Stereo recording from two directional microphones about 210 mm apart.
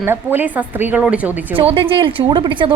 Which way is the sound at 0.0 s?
10° right (ahead or behind).